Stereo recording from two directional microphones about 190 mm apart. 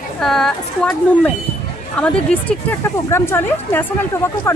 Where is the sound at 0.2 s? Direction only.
Centre (ahead or behind).